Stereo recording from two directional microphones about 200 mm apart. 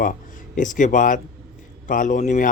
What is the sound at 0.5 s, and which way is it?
Speech, 40° left (ahead or behind).